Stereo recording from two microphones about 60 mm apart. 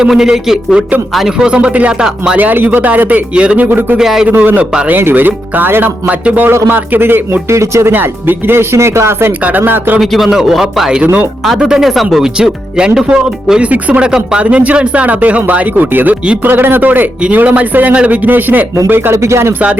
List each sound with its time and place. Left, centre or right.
0.0 s speech: centre
2.4 s speech: right
3.7 s speech: right
3.9 s speech: centre
4.3 s speech: right
7.5 s speech: right
7.9 s speech: right
9.5 s speech: right
10.0 s a man's voice: centre
11.0 s speech: right
11.6 s speech: centre
12.4 s speech: centre; by 19.1 s right
19.1 s speech: right